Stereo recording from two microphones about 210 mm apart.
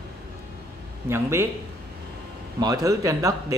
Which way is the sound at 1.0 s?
10° right (ahead or behind).